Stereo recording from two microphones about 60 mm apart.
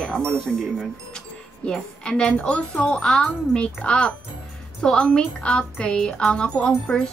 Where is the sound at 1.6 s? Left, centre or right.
Centre.